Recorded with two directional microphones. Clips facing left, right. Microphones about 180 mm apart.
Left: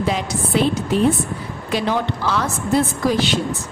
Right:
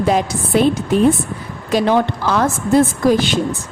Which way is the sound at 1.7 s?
50° right (ahead or behind).